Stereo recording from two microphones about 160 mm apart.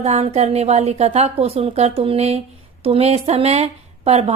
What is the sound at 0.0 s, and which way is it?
Speech, 45° right (ahead or behind).